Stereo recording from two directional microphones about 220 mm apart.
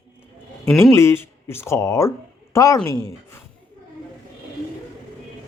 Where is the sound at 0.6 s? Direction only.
10° left (ahead or behind).